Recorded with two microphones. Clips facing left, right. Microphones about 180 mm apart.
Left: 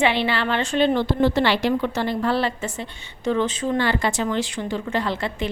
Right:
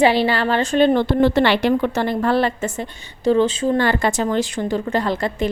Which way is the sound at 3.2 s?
35° right (ahead or behind).